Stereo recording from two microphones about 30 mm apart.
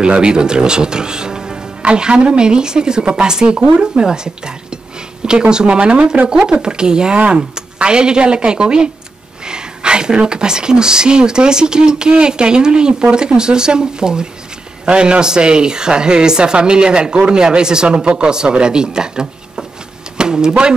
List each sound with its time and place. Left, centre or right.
0.0 s speech: right
1.8 s speech: right
4.0 s speech: right
7.2 s speech: right
17.8 s speech: right